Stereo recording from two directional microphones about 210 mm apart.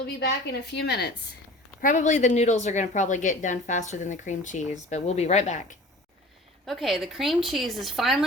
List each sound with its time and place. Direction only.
0.0 s a woman's voice: 50° left (ahead or behind)
1.8 s a woman's voice: 35° left (ahead or behind)
6.7 s a woman's voice: centre (ahead or behind)